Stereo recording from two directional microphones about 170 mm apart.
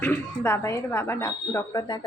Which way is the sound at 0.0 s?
15° left (ahead or behind).